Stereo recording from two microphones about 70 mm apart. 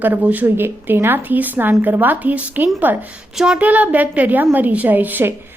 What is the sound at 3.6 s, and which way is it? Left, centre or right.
A woman's voice, right.